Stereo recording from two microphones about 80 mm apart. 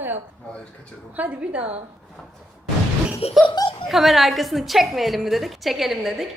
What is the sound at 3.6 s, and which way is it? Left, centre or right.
Speech, left.